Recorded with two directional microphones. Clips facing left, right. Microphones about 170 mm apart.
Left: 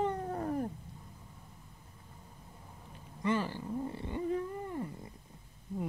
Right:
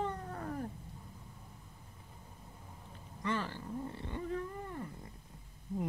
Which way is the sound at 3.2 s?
15° left (ahead or behind).